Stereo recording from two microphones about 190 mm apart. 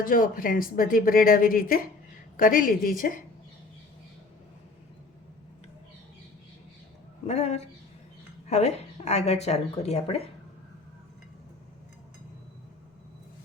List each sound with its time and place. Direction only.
0.0 s speech: 45° left (ahead or behind)
7.3 s speech: 35° left (ahead or behind)